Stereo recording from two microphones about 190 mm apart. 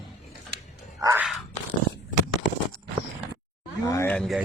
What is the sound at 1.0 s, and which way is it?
Crow, 10° right (ahead or behind).